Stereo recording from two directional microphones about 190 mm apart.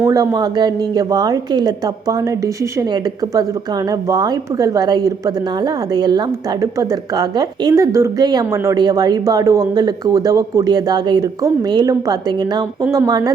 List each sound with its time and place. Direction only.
0.0 s speech: 15° right (ahead or behind)